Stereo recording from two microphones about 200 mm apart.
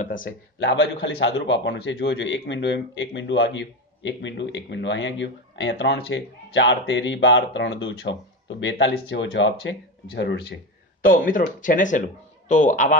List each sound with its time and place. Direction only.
0.0 s speech: 40° left (ahead or behind)
0.6 s a man's voice: 70° left (ahead or behind)
11.0 s speech: 45° left (ahead or behind)